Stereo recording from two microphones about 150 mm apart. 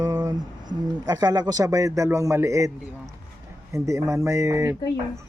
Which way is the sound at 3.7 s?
20° right (ahead or behind).